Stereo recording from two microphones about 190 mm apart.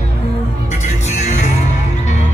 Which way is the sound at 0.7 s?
35° left (ahead or behind).